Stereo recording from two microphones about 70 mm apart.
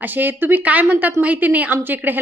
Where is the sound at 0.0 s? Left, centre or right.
Right.